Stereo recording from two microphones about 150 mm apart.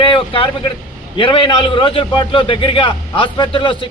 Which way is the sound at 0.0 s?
35° left (ahead or behind).